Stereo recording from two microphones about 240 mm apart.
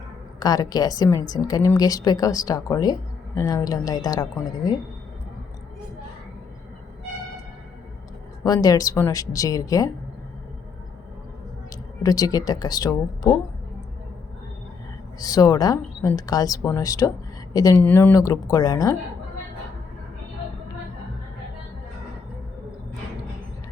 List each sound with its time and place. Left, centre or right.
0.3 s a woman's voice: centre
8.4 s a woman's voice: centre
12.0 s a woman's voice: centre
15.2 s a woman's voice: centre